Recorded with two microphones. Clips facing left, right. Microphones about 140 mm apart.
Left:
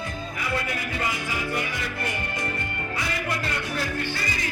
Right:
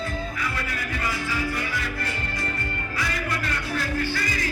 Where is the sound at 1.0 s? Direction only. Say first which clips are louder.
Right 3 dB; 20° left (ahead or behind).